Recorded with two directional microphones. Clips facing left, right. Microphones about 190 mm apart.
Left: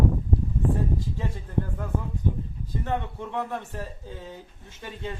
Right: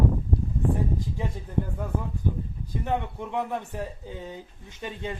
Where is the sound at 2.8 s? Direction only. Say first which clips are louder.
Right 1 dB; 15° right (ahead or behind).